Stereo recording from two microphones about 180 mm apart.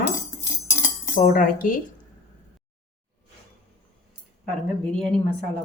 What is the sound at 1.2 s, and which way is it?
Speech, 50° left (ahead or behind).